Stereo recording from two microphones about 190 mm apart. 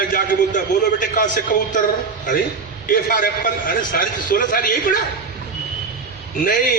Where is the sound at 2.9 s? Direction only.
45° left (ahead or behind).